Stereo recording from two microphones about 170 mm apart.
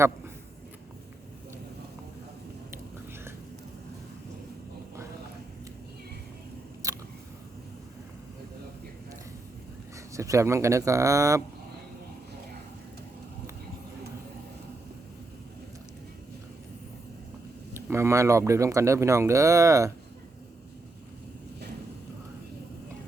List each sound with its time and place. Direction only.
2.7 s whispering: 15° right (ahead or behind)
6.8 s a sound: 20° right (ahead or behind)
10.1 s speech: 20° right (ahead or behind)
17.7 s speech: 15° right (ahead or behind)